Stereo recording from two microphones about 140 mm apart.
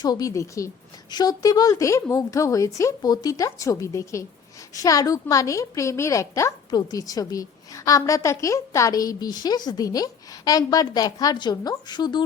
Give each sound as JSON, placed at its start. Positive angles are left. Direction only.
{"t": 0.0, "sound": "a woman's voice", "side_deg": 25}